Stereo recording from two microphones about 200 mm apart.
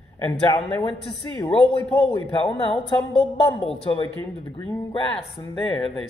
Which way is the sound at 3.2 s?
30° left (ahead or behind).